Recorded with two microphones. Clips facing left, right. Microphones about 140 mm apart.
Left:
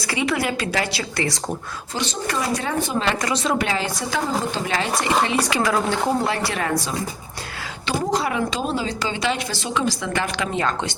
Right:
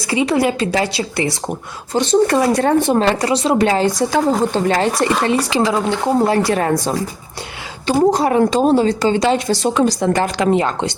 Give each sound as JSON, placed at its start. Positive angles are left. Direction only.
{"t": 0.1, "sound": "a woman's voice", "side_deg": -25}
{"t": 2.2, "sound": "a woman's voice", "side_deg": -50}
{"t": 3.2, "sound": "a woman's voice", "side_deg": -30}
{"t": 3.7, "sound": "a woman's voice", "side_deg": -45}
{"t": 5.5, "sound": "a woman's voice", "side_deg": -25}
{"t": 6.1, "sound": "a woman's voice", "side_deg": -40}
{"t": 7.9, "sound": "a woman's voice", "side_deg": -40}
{"t": 10.5, "sound": "a woman's voice", "side_deg": -25}